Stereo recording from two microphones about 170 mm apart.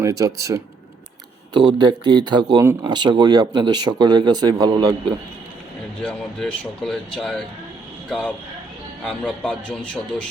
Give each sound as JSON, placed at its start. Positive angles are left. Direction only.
{"t": 0.0, "sound": "speech", "side_deg": -20}
{"t": 1.8, "sound": "speech", "side_deg": -25}
{"t": 6.0, "sound": "speech", "side_deg": 5}
{"t": 9.0, "sound": "speech", "side_deg": 5}